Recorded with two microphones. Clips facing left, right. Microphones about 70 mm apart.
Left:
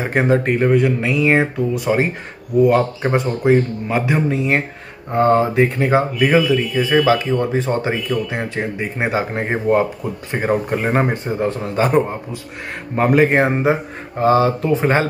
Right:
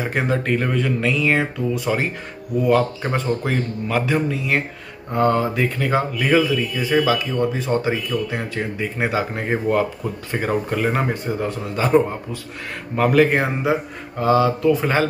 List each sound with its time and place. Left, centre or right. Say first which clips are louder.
0.0 s speech: left 5 dB; left